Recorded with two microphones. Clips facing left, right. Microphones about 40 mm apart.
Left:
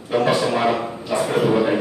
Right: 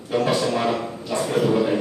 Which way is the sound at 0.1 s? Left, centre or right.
Centre.